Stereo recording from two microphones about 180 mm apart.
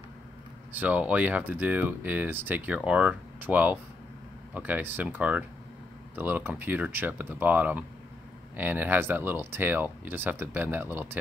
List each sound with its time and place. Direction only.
0.7 s speech: 10° right (ahead or behind)